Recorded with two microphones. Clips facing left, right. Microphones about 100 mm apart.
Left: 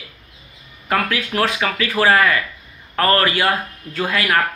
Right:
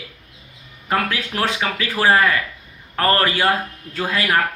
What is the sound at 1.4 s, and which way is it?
Speech, 25° right (ahead or behind).